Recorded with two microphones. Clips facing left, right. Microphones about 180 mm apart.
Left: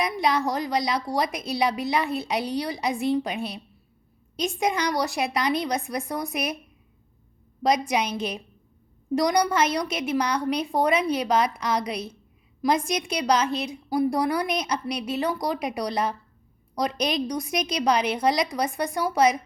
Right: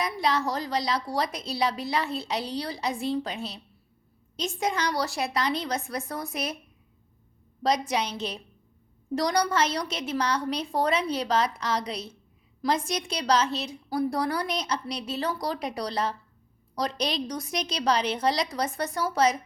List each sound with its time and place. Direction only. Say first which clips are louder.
0.0 s a woman's voice: left 3 dB; 15° left (ahead or behind)
7.6 s a woman's voice: left 3 dB; 15° left (ahead or behind)